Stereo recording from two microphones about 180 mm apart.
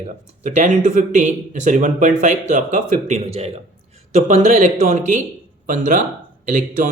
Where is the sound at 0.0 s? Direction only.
40° right (ahead or behind).